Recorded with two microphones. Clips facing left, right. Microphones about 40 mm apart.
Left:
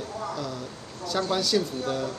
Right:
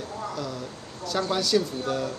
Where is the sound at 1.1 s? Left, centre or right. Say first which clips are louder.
Right 1 dB; centre.